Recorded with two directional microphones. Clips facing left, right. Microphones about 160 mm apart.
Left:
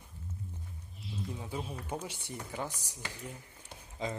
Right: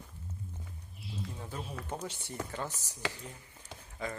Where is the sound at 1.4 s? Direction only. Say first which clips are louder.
Left 2 dB; 10° left (ahead or behind).